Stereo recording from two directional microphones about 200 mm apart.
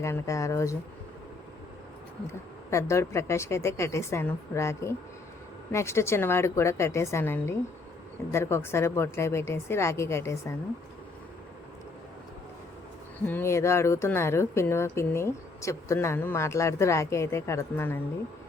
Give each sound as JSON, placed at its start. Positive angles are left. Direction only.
{"t": 0.0, "sound": "speech", "side_deg": 15}
{"t": 2.6, "sound": "speech", "side_deg": 15}
{"t": 13.2, "sound": "speech", "side_deg": 10}